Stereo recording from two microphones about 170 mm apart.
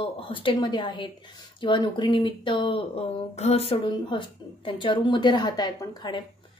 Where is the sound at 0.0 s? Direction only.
30° left (ahead or behind).